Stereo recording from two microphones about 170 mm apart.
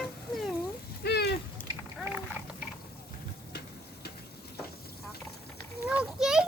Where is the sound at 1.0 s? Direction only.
75° left (ahead or behind).